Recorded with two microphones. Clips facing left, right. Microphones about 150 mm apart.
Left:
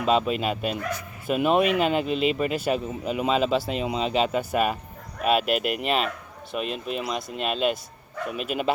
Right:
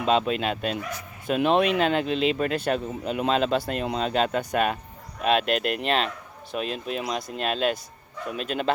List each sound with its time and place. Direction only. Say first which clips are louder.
0.0 s speech: even; 5° left (ahead or behind)